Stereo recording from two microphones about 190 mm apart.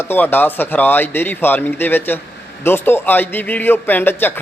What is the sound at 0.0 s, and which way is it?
A man's voice, 10° left (ahead or behind).